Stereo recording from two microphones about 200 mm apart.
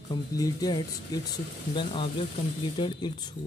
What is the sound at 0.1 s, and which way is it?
Speech, 20° left (ahead or behind).